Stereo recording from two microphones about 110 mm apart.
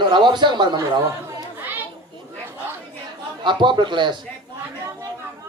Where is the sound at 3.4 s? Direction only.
45° right (ahead or behind).